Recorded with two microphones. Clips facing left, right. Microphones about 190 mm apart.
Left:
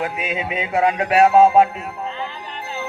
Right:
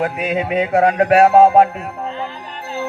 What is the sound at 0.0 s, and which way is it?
Music, 55° right (ahead or behind).